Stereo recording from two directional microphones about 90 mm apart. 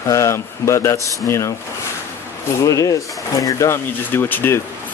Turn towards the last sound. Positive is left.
turn(degrees=25)  # may be behind; listen again after turning